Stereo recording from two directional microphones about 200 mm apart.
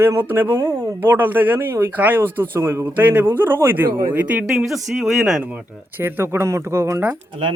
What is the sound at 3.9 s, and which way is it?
Speech, 45° right (ahead or behind).